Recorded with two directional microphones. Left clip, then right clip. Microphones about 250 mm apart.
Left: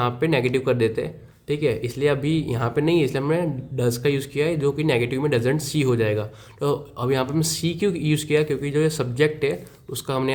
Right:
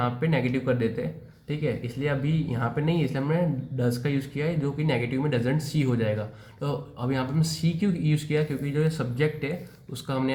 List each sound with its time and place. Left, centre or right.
0.0 s speech: left